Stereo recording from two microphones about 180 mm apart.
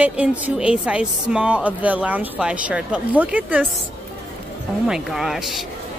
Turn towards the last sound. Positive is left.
turn(degrees=0)  # may be behind; listen again after turning